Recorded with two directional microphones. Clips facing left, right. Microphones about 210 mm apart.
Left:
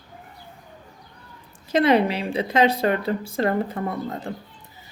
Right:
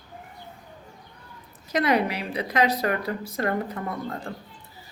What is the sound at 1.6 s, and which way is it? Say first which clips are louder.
A woman's voice: left 5 dB; 25° left (ahead or behind).